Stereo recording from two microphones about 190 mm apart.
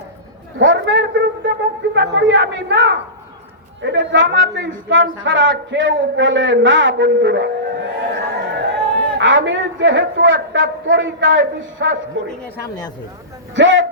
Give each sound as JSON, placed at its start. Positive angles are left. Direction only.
{"t": 0.6, "sound": "a man's voice", "side_deg": -75}
{"t": 13.6, "sound": "a man's voice", "side_deg": -70}